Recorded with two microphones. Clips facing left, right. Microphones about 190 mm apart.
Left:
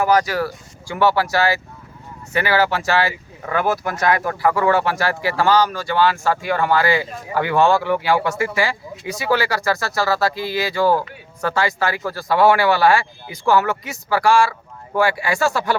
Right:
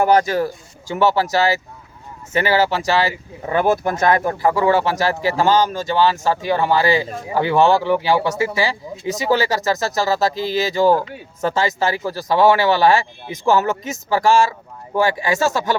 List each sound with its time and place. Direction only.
0.0 s speech: 25° right (ahead or behind)
13.4 s speech: 20° right (ahead or behind)